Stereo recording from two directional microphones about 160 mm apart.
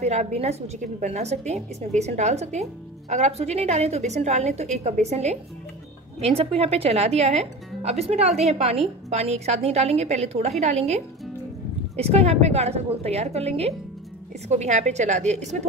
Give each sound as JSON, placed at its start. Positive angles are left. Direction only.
{"t": 0.0, "sound": "a woman's voice", "side_deg": -45}
{"t": 12.0, "sound": "a woman's voice", "side_deg": -40}